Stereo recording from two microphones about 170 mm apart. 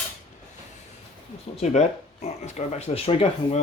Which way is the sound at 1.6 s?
40° left (ahead or behind).